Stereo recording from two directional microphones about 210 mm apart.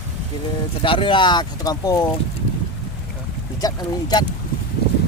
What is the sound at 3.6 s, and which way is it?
Speech, 20° left (ahead or behind).